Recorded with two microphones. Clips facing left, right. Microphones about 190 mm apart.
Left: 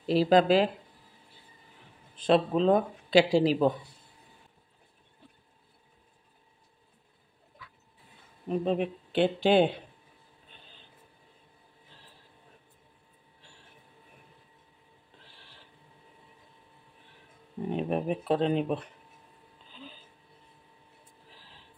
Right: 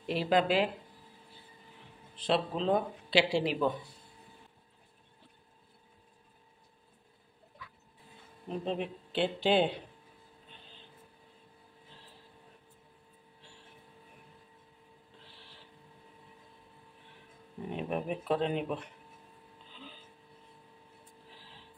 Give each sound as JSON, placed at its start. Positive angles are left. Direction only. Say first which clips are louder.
{"t": 0.0, "sound": "speech", "louder": "left 6 dB", "side_deg": 35}
{"t": 2.1, "sound": "speech", "louder": "left 7 dB", "side_deg": 50}
{"t": 8.5, "sound": "speech", "louder": "left 6 dB", "side_deg": 55}
{"t": 17.6, "sound": "speech", "louder": "left 5 dB", "side_deg": 35}